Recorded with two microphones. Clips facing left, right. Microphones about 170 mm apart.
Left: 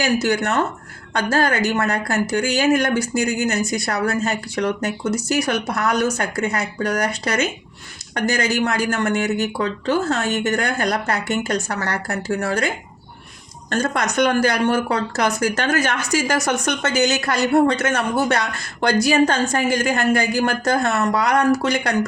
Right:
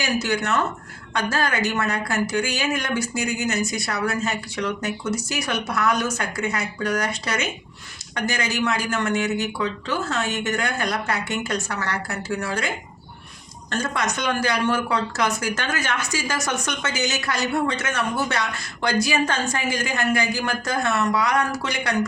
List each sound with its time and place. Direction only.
0.2 s speech: 40° left (ahead or behind)
2.8 s speech: 60° left (ahead or behind)
3.5 s speech: 40° left (ahead or behind)
13.7 s speech: 45° left (ahead or behind)
16.3 s speech: 60° left (ahead or behind)